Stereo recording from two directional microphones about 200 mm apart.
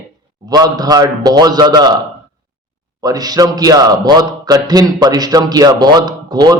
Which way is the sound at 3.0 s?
20° right (ahead or behind).